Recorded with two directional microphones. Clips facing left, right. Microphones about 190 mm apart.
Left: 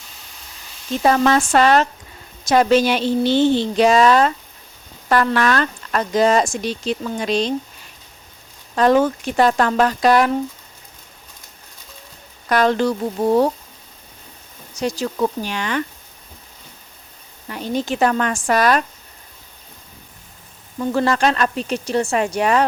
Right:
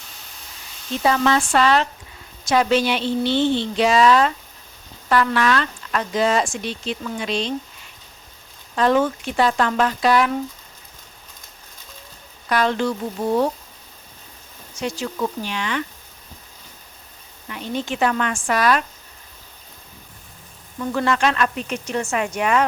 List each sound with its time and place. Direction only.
1.0 s a woman's voice: 45° left (ahead or behind)
8.7 s a woman's voice: 40° left (ahead or behind)
12.5 s speech: 45° left (ahead or behind)
14.8 s speech: 40° left (ahead or behind)
17.5 s speech: 40° left (ahead or behind)
20.7 s speech: 35° left (ahead or behind)